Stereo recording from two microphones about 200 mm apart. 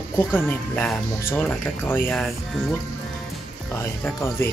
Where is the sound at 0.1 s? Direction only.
10° left (ahead or behind).